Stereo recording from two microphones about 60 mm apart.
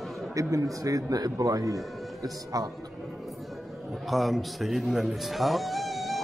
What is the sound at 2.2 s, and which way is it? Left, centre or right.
Speech, right.